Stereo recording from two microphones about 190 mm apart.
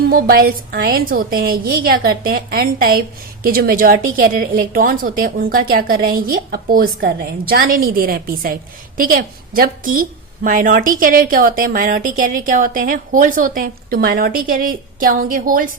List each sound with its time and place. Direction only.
0.1 s a woman's voice: 50° right (ahead or behind)